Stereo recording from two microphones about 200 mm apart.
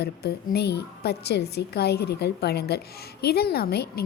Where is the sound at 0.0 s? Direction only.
55° left (ahead or behind).